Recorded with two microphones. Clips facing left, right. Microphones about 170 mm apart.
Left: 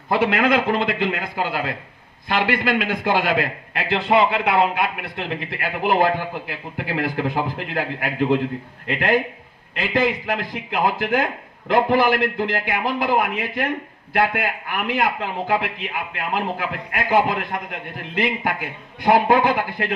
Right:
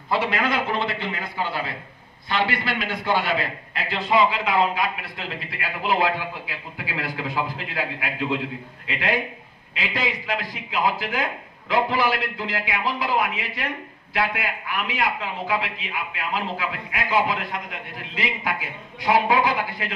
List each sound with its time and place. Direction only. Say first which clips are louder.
0.1 s a man's voice: left 5 dB; 50° left (ahead or behind)